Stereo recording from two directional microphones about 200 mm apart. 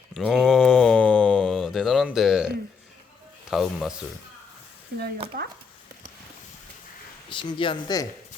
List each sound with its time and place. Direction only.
0.1 s a sound: centre (ahead or behind)
3.5 s speech: centre (ahead or behind)
7.3 s speech: 25° left (ahead or behind)